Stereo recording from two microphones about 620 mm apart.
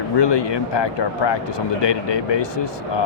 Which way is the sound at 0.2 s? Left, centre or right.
Left.